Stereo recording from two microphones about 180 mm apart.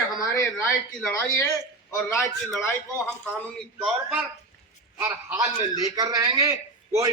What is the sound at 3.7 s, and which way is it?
Speech, 5° right (ahead or behind).